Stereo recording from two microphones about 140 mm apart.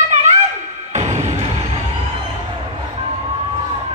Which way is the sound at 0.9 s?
55° right (ahead or behind).